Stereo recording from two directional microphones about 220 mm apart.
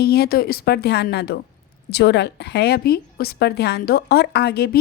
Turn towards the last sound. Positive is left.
turn(degrees=45)  # may be behind; listen again after turning